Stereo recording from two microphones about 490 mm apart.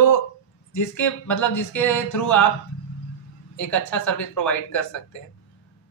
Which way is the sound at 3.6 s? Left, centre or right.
Left.